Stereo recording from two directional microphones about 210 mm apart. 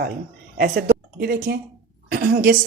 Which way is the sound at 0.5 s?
45° right (ahead or behind).